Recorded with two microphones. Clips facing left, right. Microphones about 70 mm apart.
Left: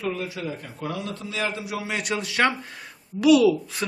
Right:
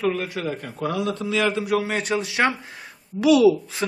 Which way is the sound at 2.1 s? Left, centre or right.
Right.